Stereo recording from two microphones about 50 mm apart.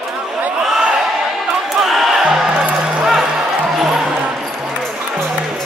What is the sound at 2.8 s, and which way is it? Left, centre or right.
Music, centre.